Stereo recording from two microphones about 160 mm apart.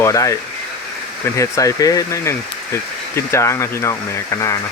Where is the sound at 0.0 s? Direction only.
20° left (ahead or behind).